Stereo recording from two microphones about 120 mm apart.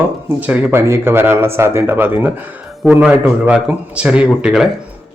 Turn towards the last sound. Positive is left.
turn(degrees=-5)  # may be behind; listen again after turning